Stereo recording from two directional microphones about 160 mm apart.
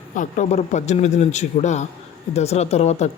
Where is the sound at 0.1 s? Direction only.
50° left (ahead or behind).